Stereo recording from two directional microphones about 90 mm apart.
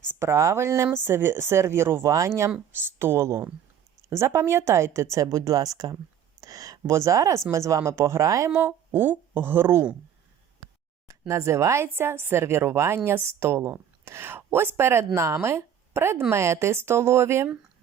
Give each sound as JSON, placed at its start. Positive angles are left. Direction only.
{"t": 0.1, "sound": "a woman's voice", "side_deg": -30}
{"t": 2.7, "sound": "a woman's voice", "side_deg": -25}
{"t": 8.4, "sound": "a woman's voice", "side_deg": -25}
{"t": 11.3, "sound": "a woman's voice", "side_deg": -35}